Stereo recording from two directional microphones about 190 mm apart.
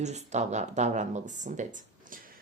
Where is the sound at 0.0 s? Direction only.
35° right (ahead or behind).